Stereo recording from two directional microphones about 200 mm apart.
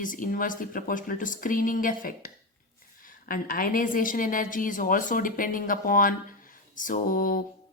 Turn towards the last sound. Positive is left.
turn(degrees=45)  # may be behind; listen again after turning